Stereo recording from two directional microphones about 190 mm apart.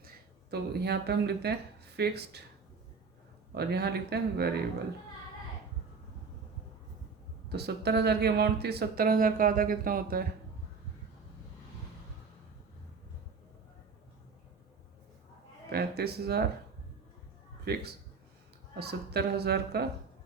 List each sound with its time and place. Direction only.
0.5 s speech: 60° right (ahead or behind)
3.5 s speech: 60° right (ahead or behind)
7.5 s speech: 60° right (ahead or behind)
15.7 s speech: 55° right (ahead or behind)
17.7 s speech: 60° right (ahead or behind)